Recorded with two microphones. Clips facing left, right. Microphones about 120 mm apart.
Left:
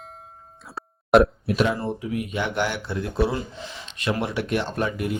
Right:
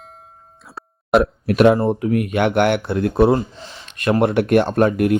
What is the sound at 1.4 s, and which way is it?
Speech, 60° right (ahead or behind).